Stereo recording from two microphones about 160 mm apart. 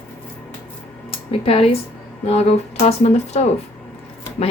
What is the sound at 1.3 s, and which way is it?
Speech, 35° left (ahead or behind).